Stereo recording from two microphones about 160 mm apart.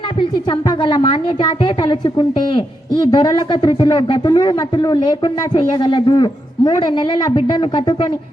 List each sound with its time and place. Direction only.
0.8 s a woman's voice: 30° left (ahead or behind)